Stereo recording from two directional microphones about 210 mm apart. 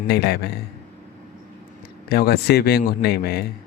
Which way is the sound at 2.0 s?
50° left (ahead or behind).